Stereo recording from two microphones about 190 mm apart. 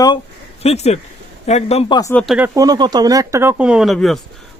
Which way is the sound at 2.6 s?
20° right (ahead or behind).